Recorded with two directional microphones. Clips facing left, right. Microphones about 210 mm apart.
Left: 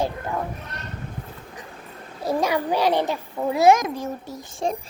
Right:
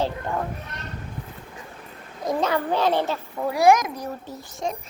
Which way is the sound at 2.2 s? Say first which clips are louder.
Left 1 dB; 10° left (ahead or behind).